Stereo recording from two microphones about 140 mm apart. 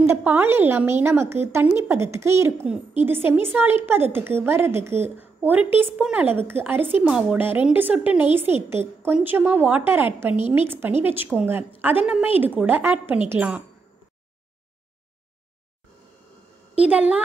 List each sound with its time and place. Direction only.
0.1 s a woman's voice: 15° right (ahead or behind)
16.7 s a woman's voice: 10° right (ahead or behind)